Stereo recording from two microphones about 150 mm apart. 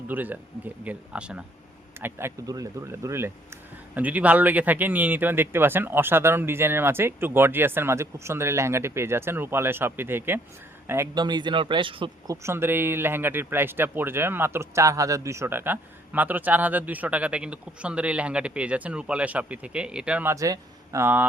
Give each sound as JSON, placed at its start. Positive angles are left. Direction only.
{"t": 0.1, "sound": "speech", "side_deg": -10}
{"t": 11.2, "sound": "speech", "side_deg": -30}
{"t": 12.3, "sound": "speech", "side_deg": -20}
{"t": 20.3, "sound": "speech", "side_deg": -20}